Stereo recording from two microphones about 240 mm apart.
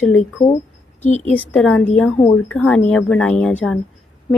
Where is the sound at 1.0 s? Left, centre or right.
Left.